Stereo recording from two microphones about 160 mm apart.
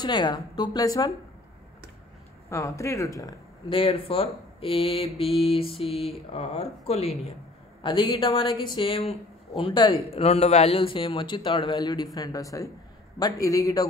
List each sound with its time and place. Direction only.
0.0 s a woman's voice: 25° left (ahead or behind)
2.5 s a woman's voice: 20° left (ahead or behind)